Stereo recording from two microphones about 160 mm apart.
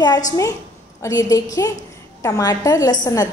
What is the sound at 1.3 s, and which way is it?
A woman's voice, 20° left (ahead or behind).